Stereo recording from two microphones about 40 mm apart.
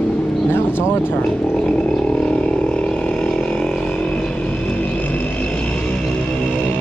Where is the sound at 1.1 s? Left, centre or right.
Left.